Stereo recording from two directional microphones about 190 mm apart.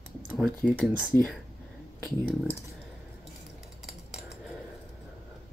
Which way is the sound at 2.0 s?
10° right (ahead or behind).